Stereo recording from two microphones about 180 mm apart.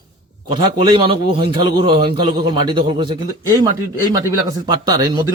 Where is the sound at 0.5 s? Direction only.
30° right (ahead or behind).